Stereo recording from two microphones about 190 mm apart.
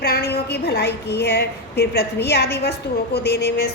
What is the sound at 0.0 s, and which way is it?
A woman's voice, 55° left (ahead or behind).